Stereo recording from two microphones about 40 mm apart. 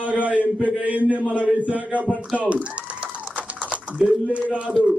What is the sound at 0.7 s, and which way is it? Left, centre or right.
Speech, right.